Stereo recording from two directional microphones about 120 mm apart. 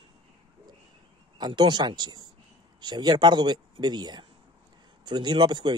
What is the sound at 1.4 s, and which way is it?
Speech, 40° right (ahead or behind).